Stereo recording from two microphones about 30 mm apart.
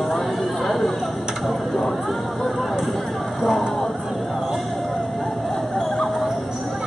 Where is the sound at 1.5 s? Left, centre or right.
Centre.